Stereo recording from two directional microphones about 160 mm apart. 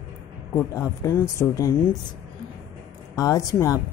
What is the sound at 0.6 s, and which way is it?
Speech, 15° left (ahead or behind).